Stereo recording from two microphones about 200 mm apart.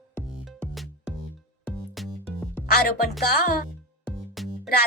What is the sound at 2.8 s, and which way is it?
Speech, 50° left (ahead or behind).